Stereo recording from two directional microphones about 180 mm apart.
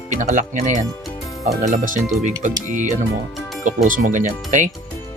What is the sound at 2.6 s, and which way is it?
Speech, 45° right (ahead or behind).